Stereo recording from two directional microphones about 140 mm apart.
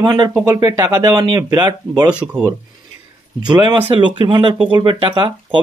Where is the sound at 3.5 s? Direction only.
30° right (ahead or behind).